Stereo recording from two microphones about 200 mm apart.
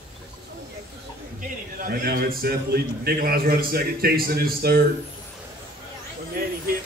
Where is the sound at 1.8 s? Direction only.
50° right (ahead or behind).